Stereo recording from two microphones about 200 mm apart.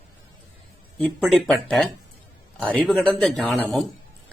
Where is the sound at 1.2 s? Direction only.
Centre (ahead or behind).